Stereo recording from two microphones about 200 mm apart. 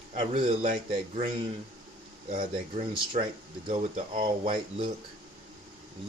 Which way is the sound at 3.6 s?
25° right (ahead or behind).